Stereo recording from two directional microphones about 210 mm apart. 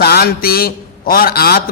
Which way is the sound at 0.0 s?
50° left (ahead or behind).